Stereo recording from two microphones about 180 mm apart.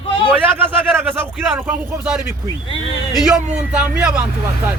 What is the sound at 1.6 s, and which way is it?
Speech, 10° right (ahead or behind).